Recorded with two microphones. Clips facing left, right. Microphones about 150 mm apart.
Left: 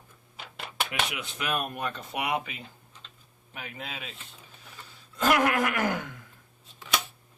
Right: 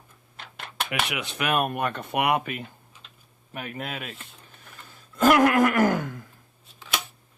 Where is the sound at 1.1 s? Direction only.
70° right (ahead or behind); by 6.2 s 45° right (ahead or behind).